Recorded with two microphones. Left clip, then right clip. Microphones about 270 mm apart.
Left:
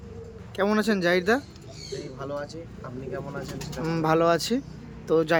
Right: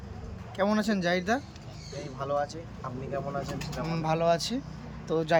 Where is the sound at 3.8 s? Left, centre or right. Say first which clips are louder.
Left 5 dB; centre.